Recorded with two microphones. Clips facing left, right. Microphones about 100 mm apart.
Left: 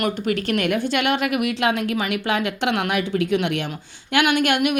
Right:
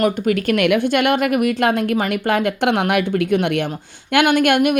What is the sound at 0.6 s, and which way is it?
Speech, 65° right (ahead or behind).